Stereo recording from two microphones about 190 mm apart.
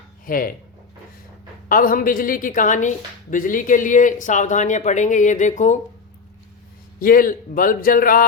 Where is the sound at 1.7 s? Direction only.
45° left (ahead or behind).